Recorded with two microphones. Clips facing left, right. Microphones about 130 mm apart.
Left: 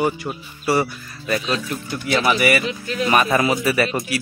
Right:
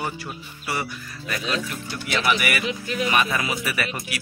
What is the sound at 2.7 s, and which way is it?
Speech, 10° right (ahead or behind).